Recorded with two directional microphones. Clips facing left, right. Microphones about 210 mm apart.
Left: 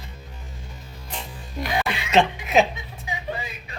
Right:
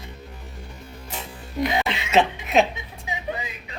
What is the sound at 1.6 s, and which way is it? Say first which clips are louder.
Music: right 2 dB; 25° right (ahead or behind).